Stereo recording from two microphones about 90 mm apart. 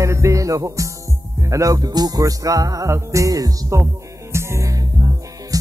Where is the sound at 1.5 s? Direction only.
40° right (ahead or behind).